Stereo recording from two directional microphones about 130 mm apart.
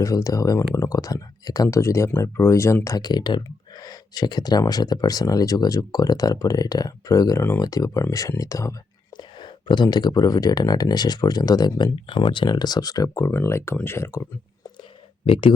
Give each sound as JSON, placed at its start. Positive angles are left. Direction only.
{"t": 0.0, "sound": "speech", "side_deg": 25}
{"t": 7.6, "sound": "speech", "side_deg": 25}
{"t": 9.1, "sound": "speech", "side_deg": 35}
{"t": 15.3, "sound": "speech", "side_deg": 40}